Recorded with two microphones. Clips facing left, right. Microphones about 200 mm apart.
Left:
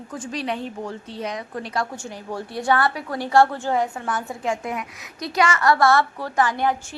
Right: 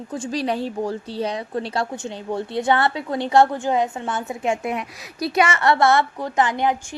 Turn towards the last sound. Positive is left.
turn(degrees=-20)  # may be behind; listen again after turning